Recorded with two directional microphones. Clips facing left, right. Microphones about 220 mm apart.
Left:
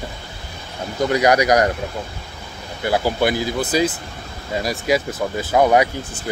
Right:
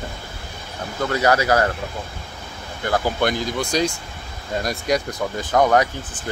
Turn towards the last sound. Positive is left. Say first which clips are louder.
# left 2 dB
turn(degrees=10)  # may be behind; listen again after turning